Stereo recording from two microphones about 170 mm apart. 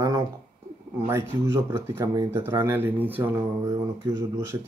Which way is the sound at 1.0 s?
15° right (ahead or behind).